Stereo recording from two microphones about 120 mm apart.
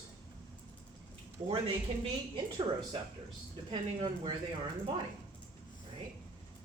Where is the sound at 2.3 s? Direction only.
45° right (ahead or behind).